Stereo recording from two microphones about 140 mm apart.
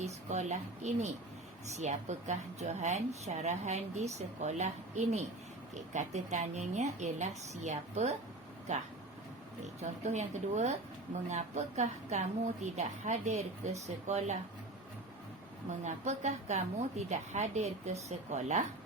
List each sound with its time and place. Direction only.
0.0 s a woman's voice: 55° right (ahead or behind)
15.8 s a woman's voice: 55° right (ahead or behind)